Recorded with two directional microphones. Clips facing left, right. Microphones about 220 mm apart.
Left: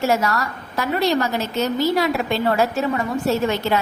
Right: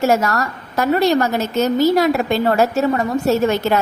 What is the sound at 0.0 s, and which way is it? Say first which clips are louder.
A woman's voice: right 3 dB; 45° right (ahead or behind).